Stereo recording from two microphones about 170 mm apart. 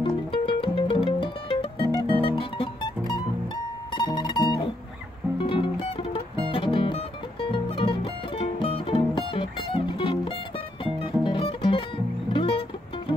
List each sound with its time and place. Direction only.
0.0 s music: 30° left (ahead or behind)